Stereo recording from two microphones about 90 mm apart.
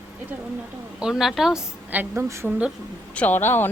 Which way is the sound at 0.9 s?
5° right (ahead or behind).